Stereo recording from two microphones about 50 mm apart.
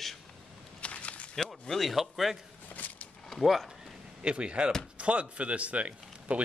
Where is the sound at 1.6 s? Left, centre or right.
Centre.